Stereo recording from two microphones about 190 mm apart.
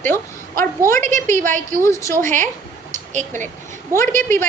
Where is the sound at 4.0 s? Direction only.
15° left (ahead or behind).